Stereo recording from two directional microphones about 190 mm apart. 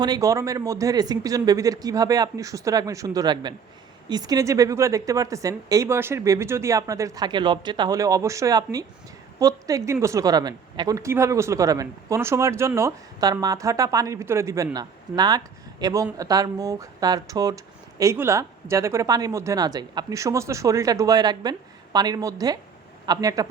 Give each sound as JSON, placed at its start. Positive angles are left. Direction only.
{"t": 0.0, "sound": "a woman's voice", "side_deg": -20}